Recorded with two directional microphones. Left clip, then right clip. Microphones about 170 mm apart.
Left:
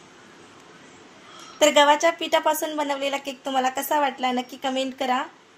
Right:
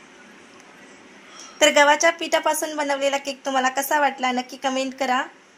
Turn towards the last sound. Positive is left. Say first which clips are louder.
# right 2 dB
turn(degrees=-5)  # may be behind; listen again after turning